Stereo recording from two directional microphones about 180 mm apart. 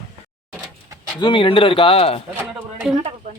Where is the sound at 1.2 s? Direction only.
25° left (ahead or behind).